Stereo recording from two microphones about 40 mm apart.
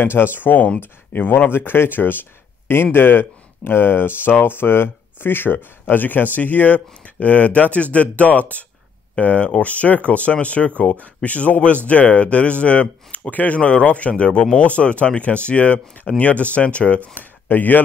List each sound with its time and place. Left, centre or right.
0.0 s speech: left
1.5 s speech: left
2.7 s speech: left
17.1 s speech: left